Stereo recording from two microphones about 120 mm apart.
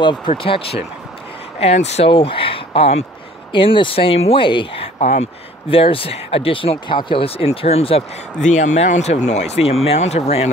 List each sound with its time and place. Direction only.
0.0 s speech: 40° left (ahead or behind)
0.4 s speech: 50° left (ahead or behind)
1.6 s speech: 65° left (ahead or behind)
2.0 s speech: 50° left (ahead or behind)
3.5 s speech: 45° left (ahead or behind)
4.9 s speech: 70° left (ahead or behind)
5.7 s speech: 50° left (ahead or behind)
8.4 s speech: 90° left; by 10.5 s 60° left (ahead or behind)